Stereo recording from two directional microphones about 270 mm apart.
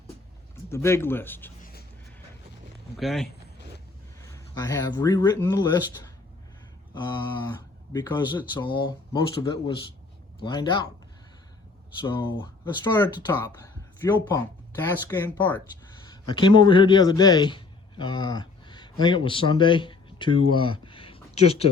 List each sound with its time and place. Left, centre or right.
0.5 s speech: centre
3.0 s speech: centre
4.5 s speech: centre
11.9 s speech: centre
16.2 s a man's voice: centre